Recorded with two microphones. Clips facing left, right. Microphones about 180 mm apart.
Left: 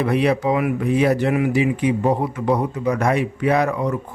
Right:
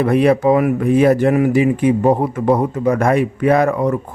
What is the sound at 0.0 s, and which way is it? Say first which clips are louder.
Speech: right 5 dB; 50° right (ahead or behind).